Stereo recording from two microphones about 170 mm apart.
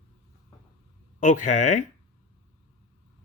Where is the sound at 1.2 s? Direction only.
45° left (ahead or behind).